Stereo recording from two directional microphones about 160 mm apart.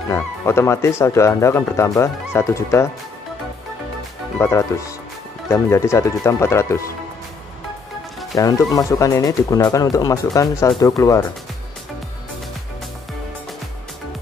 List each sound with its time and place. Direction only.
0.1 s speech: 15° left (ahead or behind)
4.4 s speech: 15° left (ahead or behind)
8.4 s speech: 20° left (ahead or behind)